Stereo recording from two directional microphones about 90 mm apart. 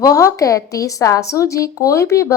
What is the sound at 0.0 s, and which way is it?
A woman's voice, 40° left (ahead or behind).